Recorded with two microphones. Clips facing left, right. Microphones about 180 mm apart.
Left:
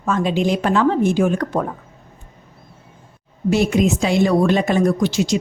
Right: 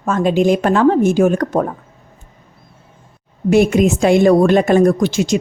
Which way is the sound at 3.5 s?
50° right (ahead or behind).